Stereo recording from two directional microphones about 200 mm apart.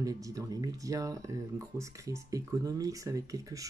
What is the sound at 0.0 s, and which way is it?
Speech, 15° right (ahead or behind).